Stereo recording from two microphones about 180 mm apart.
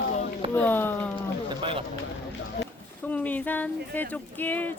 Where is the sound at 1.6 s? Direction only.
30° right (ahead or behind).